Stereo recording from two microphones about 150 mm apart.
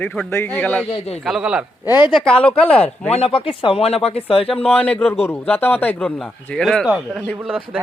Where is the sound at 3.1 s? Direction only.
40° left (ahead or behind).